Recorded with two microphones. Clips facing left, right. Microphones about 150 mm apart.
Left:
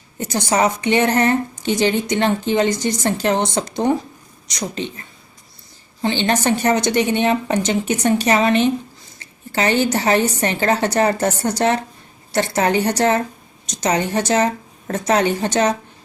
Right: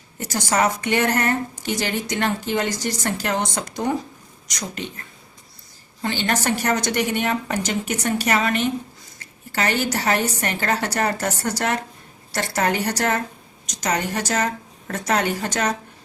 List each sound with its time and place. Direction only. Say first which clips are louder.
0.3 s a woman's voice: left 3 dB; 20° left (ahead or behind)
6.0 s a woman's voice: left 5 dB; 20° left (ahead or behind)